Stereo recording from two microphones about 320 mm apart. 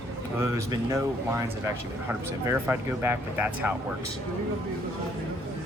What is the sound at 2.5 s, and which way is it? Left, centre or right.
Speech, centre.